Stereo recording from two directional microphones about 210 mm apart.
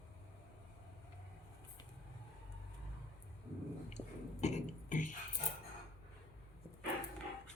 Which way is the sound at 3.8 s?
30° left (ahead or behind).